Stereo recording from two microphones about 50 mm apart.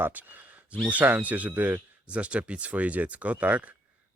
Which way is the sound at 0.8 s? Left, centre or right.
Right.